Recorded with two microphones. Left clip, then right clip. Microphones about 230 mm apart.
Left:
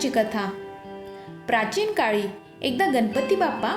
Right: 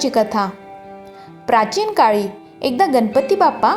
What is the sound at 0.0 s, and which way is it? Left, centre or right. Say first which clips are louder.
A woman's voice: right 7 dB; right.